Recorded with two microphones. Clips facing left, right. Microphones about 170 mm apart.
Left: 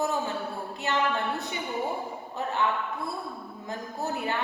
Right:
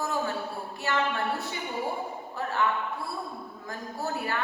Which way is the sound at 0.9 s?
20° left (ahead or behind).